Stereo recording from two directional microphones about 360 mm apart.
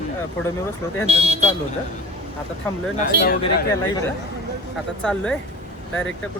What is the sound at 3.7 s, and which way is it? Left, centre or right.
Speech, centre.